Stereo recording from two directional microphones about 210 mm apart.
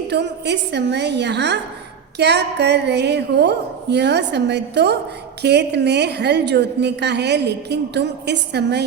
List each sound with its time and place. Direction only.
0.1 s a woman's voice: 55° right (ahead or behind)